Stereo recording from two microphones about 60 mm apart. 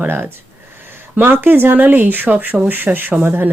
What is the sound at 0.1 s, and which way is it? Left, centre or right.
Speech, right.